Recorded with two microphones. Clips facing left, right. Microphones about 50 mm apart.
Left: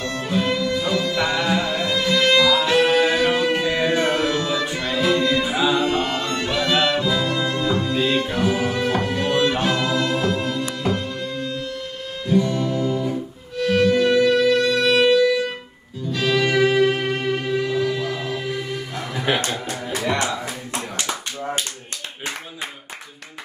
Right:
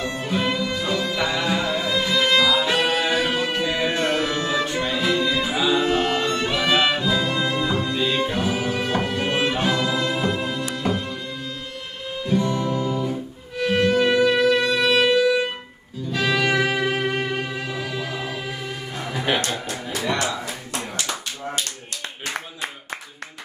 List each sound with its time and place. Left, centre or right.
0.2 s music: centre
2.9 s music: centre
4.3 s music: centre
4.7 s music: centre
9.2 s music: centre
9.5 s music: centre
12.4 s music: centre